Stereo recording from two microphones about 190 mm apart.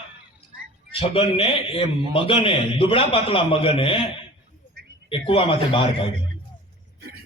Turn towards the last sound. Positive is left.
turn(degrees=30)  # may be behind; listen again after turning